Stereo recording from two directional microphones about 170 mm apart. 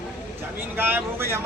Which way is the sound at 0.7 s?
10° right (ahead or behind).